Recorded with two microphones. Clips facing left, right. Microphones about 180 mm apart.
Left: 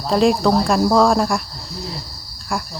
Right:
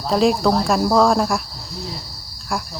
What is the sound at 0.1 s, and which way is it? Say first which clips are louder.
Speech: left 1 dB; centre (ahead or behind).